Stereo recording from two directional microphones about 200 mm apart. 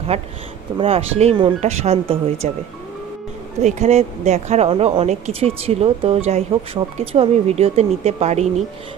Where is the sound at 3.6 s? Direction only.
35° right (ahead or behind).